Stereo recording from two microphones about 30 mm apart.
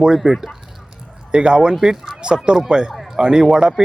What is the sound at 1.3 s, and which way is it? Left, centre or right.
Speech, right.